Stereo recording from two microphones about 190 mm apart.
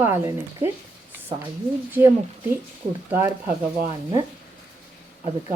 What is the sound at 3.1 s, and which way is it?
Speech, 15° right (ahead or behind).